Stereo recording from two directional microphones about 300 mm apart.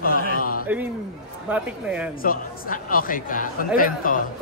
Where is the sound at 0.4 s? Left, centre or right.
Left.